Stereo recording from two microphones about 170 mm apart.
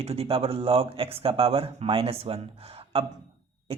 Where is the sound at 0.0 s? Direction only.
35° right (ahead or behind).